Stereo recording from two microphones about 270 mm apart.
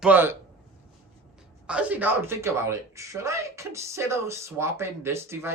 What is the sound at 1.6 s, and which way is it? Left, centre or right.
Speech, centre.